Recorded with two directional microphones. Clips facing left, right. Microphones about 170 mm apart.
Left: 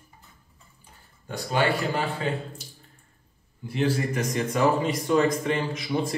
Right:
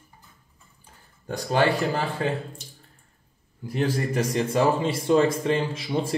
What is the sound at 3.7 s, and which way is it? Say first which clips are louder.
A man's voice: even; 35° right (ahead or behind).